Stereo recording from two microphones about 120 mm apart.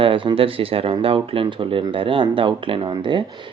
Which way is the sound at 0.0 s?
45° right (ahead or behind).